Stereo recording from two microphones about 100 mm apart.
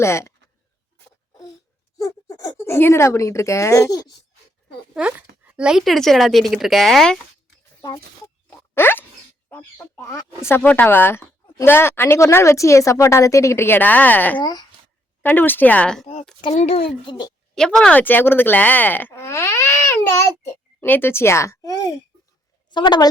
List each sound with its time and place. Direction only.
0.0 s speech: 30° left (ahead or behind)
2.0 s speech: 35° left (ahead or behind)
4.9 s speech: 10° right (ahead or behind); by 7.2 s 5° left (ahead or behind)
7.8 s speech: 35° left (ahead or behind)
8.5 s a sound: 25° left (ahead or behind)
9.5 s speech: 20° left (ahead or behind)
10.6 s speech: 15° left (ahead or behind)
16.5 s speech: 90° left
17.1 s a woman's voice: 45° left (ahead or behind)
17.5 s speech: 5° left (ahead or behind); by 21.9 s 35° left (ahead or behind)
22.7 s a woman's voice: 50° left (ahead or behind)